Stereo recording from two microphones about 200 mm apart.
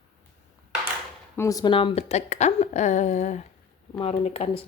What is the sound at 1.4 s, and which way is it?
Speech, 15° left (ahead or behind).